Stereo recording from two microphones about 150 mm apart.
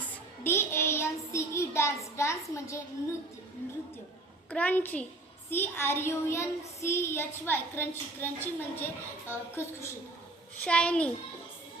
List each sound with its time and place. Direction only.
0.4 s speech: 15° left (ahead or behind)
4.4 s speech: 10° left (ahead or behind)